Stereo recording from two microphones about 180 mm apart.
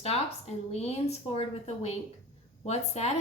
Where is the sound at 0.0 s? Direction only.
35° left (ahead or behind).